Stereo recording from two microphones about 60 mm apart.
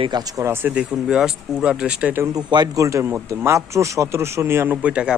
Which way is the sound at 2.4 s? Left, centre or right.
Right.